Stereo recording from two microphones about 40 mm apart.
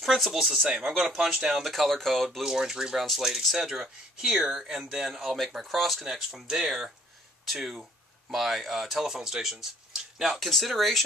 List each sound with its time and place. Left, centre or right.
0.3 s speech: centre
2.4 s speech: centre
5.4 s speech: centre
6.4 s speech: centre
10.3 s speech: centre